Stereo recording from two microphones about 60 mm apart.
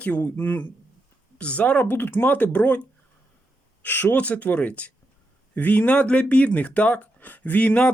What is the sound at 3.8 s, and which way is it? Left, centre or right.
Speech, left.